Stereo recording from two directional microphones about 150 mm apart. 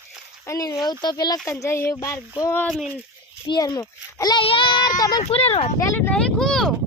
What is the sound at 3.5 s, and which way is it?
Speech, 25° left (ahead or behind).